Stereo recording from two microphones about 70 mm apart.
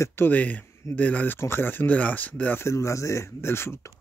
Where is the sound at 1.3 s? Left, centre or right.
Left.